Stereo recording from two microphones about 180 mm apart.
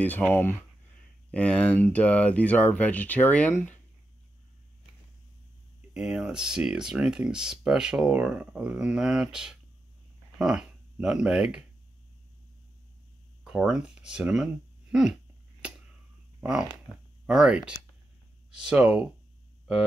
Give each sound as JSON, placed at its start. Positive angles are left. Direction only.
{"t": 0.0, "sound": "speech", "side_deg": 10}
{"t": 5.9, "sound": "speech", "side_deg": -5}
{"t": 13.4, "sound": "speech", "side_deg": -5}
{"t": 15.6, "sound": "a sound", "side_deg": -5}
{"t": 17.3, "sound": "speech", "side_deg": -5}